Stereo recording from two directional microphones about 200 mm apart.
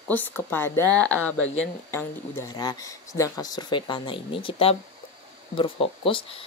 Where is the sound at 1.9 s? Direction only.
10° left (ahead or behind).